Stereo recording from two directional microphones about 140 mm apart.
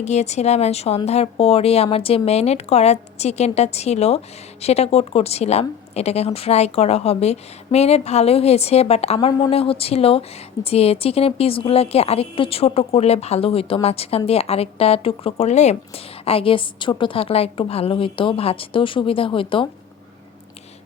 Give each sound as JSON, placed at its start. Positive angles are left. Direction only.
{"t": 0.0, "sound": "speech", "side_deg": 55}
{"t": 16.2, "sound": "a woman's voice", "side_deg": 40}